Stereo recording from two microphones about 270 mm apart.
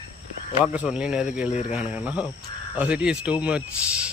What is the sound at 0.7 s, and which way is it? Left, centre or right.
Speech, centre.